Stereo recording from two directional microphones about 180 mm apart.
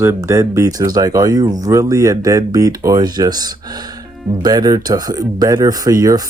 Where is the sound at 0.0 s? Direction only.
15° right (ahead or behind).